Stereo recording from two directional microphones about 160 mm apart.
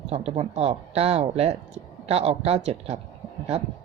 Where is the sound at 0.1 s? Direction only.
40° right (ahead or behind).